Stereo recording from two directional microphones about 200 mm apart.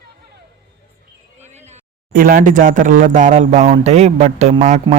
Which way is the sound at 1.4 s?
35° right (ahead or behind).